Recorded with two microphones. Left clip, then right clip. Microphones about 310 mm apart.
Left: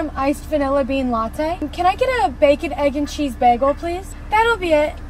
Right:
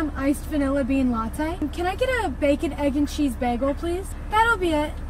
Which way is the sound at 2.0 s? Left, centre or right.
Left.